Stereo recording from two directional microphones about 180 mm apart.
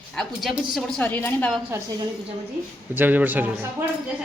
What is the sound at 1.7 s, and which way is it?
A woman's voice, 20° right (ahead or behind).